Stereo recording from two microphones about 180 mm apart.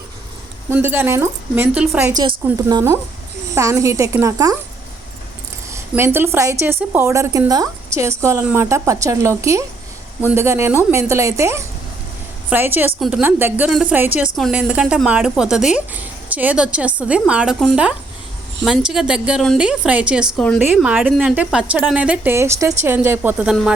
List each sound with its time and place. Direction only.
0.7 s a woman's voice: 10° right (ahead or behind)
2.6 s a woman's voice: 20° right (ahead or behind)
5.9 s a woman's voice: 10° right (ahead or behind)